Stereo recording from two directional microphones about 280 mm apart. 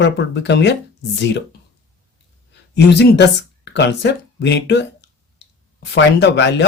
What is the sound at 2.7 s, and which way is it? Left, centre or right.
Speech, left.